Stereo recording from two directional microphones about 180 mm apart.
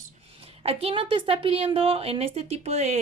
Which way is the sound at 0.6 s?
35° right (ahead or behind).